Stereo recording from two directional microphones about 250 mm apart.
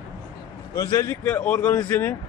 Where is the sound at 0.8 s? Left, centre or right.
Centre.